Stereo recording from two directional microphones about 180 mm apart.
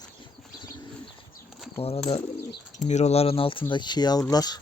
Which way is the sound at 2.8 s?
40° left (ahead or behind).